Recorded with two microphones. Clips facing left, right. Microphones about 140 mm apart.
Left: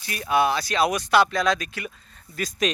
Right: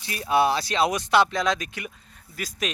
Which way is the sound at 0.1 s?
30° right (ahead or behind).